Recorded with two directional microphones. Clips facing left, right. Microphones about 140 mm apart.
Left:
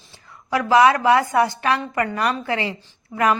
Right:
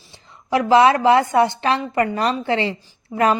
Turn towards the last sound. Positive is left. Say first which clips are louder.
# right 3 dB
turn(degrees=-15)  # may be behind; listen again after turning